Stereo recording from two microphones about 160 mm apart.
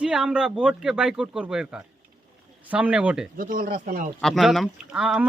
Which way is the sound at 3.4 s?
60° right (ahead or behind).